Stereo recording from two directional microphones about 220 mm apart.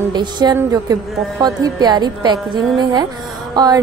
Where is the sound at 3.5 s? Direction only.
15° right (ahead or behind).